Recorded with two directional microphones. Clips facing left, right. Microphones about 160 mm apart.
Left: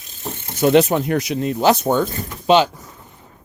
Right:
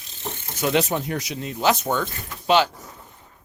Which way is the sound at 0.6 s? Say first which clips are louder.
Left 8 dB; 50° left (ahead or behind).